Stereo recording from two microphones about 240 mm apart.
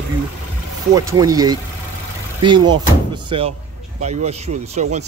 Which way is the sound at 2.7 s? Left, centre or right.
Centre.